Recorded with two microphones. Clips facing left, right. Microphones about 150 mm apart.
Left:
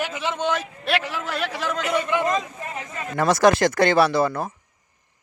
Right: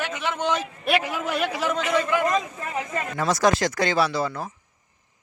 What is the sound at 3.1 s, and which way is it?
A man's voice, 65° left (ahead or behind).